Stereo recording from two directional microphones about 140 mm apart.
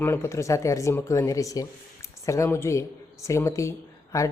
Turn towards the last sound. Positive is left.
turn(degrees=25)  # may be behind; listen again after turning